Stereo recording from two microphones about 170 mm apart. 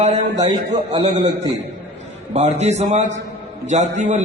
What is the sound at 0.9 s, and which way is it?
Speech, 20° right (ahead or behind).